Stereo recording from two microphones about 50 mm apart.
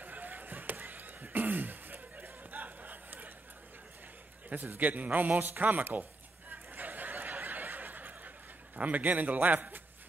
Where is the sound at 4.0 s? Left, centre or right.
Right.